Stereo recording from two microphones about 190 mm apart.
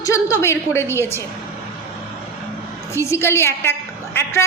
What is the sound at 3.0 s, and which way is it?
Speech, 15° left (ahead or behind).